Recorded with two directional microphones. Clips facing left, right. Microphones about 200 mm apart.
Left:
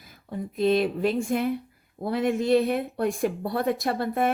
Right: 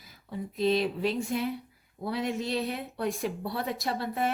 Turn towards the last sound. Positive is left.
turn(degrees=55)  # may be behind; listen again after turning